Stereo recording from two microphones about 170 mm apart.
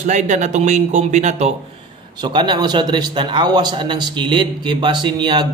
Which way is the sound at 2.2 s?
25° right (ahead or behind).